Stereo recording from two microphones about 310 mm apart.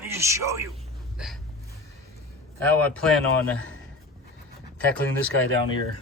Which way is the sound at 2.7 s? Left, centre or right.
Centre.